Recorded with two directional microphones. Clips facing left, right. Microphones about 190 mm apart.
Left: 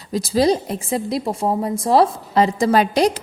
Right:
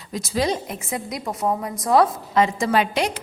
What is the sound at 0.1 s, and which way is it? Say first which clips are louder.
A woman's voice: left 6 dB; 35° left (ahead or behind).